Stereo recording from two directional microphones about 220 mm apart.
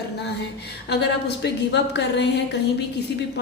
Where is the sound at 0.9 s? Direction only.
50° left (ahead or behind).